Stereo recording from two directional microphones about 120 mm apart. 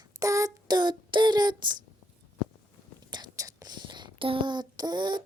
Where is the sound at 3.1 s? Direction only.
35° right (ahead or behind).